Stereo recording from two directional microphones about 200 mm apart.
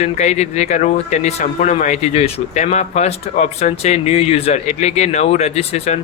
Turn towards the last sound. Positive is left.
turn(degrees=30)  # may be behind; listen again after turning